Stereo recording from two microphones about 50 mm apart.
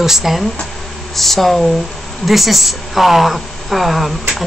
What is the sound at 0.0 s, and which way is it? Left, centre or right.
Speech, centre.